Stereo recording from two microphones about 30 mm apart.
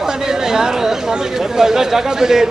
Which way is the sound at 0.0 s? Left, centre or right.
Centre.